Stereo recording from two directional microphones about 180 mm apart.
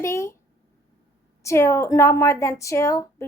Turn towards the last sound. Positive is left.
turn(degrees=15)  # may be behind; listen again after turning